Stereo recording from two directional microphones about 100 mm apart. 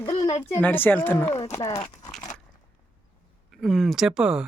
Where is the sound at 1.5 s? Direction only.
40° left (ahead or behind).